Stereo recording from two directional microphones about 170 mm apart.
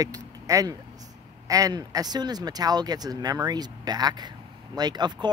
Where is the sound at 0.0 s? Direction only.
20° right (ahead or behind).